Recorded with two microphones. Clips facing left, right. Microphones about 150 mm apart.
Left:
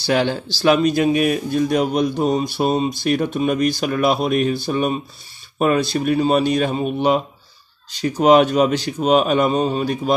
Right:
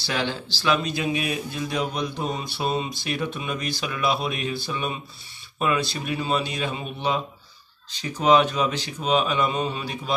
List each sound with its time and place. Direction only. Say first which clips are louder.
0.0 s speech: left 9 dB; 45° left (ahead or behind)